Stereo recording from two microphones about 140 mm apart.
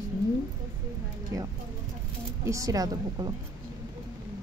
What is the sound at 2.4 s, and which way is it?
Speech, 25° right (ahead or behind).